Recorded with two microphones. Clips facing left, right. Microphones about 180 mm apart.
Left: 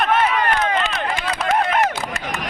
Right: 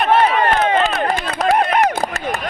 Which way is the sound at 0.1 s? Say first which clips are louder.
Right 4 dB; 30° right (ahead or behind).